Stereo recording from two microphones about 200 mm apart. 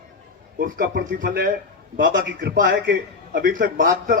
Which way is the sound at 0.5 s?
50° right (ahead or behind).